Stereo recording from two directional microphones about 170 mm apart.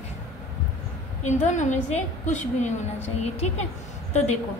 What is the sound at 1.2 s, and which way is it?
A woman's voice, 45° left (ahead or behind).